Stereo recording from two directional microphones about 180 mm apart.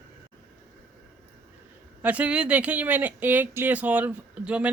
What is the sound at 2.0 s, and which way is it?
Speech, 10° right (ahead or behind).